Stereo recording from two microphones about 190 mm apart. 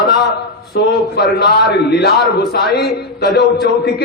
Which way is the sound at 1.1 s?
60° left (ahead or behind).